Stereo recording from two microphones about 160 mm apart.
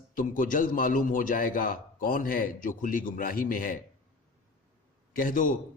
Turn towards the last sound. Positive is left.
turn(degrees=55)  # may be behind; listen again after turning